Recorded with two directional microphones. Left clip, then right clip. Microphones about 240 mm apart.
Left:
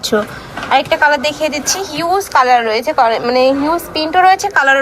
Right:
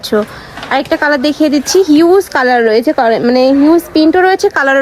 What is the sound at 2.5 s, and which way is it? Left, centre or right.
Speech, right.